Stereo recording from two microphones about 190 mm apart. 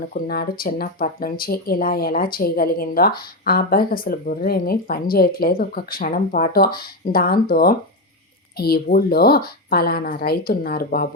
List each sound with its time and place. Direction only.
0.1 s speech: 50° left (ahead or behind)